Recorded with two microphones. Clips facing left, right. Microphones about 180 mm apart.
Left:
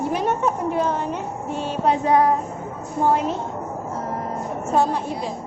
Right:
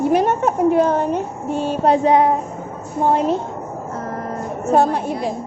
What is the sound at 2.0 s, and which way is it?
Speech, 20° right (ahead or behind).